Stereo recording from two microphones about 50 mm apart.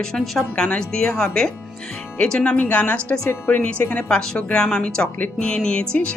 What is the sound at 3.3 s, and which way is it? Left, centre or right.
Speech, left.